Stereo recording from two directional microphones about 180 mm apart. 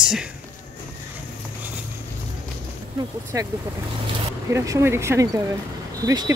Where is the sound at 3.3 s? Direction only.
15° right (ahead or behind).